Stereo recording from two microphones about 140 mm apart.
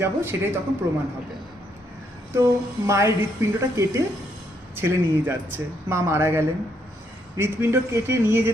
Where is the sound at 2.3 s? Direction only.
20° right (ahead or behind).